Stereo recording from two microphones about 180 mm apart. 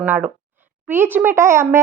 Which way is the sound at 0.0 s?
10° right (ahead or behind).